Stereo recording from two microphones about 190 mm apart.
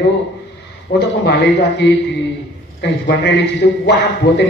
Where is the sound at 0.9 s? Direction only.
65° left (ahead or behind).